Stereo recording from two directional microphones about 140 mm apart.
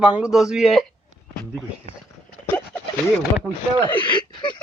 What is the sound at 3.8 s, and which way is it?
Speech, 35° left (ahead or behind).